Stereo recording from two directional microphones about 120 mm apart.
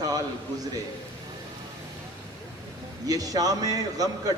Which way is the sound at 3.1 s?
30° right (ahead or behind).